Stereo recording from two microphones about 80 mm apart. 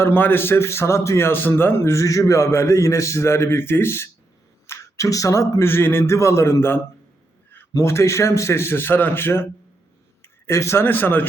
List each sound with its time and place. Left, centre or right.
0.0 s a man's voice: left